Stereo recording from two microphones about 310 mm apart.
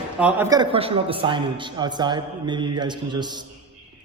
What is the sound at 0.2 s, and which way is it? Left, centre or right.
A man's voice, centre.